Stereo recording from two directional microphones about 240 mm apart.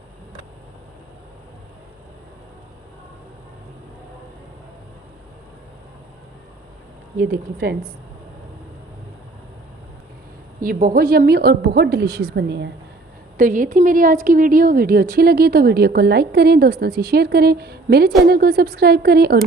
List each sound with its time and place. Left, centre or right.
7.2 s speech: right
10.6 s a woman's voice: right
13.3 s speech: right